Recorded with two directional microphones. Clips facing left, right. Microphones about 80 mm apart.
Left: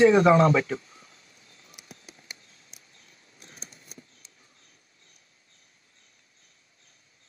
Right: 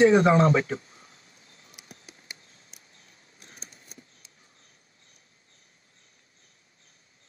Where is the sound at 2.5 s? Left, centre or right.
Right.